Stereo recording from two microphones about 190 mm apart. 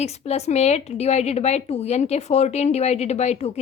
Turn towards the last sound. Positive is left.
turn(degrees=35)  # may be behind; listen again after turning